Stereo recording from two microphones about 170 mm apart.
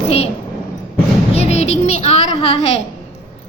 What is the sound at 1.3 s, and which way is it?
A woman's voice, 40° left (ahead or behind).